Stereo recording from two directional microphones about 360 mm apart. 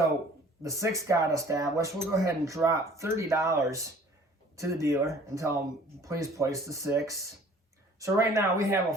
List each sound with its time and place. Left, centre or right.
0.6 s speech: centre